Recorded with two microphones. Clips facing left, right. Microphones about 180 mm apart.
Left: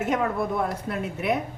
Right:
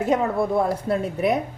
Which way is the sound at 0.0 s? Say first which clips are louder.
Right 4 dB; 30° right (ahead or behind).